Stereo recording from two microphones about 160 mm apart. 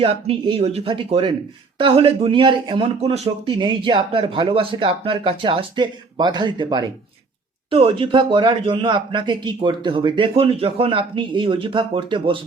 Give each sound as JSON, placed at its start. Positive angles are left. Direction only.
{"t": 0.0, "sound": "speech", "side_deg": -35}